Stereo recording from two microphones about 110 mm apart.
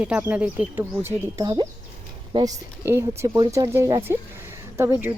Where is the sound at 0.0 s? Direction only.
15° right (ahead or behind).